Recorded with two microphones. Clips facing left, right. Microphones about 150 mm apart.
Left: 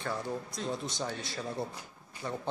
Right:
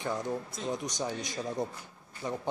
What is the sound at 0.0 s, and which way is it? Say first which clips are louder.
Speech: right 2 dB; 20° right (ahead or behind).